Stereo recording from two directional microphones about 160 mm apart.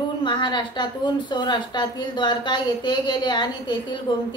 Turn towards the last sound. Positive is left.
turn(degrees=30)  # may be behind; listen again after turning